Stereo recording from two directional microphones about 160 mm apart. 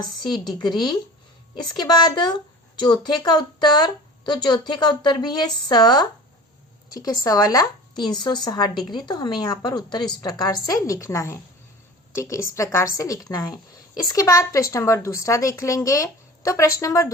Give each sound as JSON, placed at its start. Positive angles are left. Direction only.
{"t": 0.2, "sound": "speech", "side_deg": 30}